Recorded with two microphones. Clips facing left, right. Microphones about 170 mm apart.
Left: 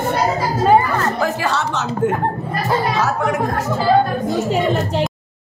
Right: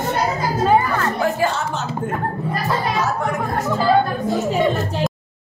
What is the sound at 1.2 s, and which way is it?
Speech, 80° left.